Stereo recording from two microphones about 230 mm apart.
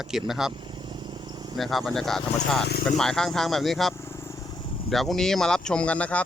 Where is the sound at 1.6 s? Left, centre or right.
Centre.